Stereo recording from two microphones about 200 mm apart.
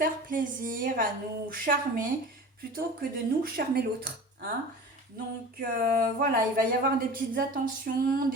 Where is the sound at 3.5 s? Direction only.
50° right (ahead or behind).